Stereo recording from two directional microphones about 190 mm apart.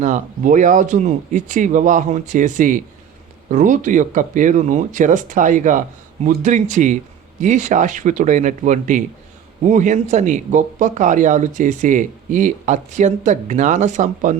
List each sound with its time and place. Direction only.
0.0 s speech: 40° right (ahead or behind)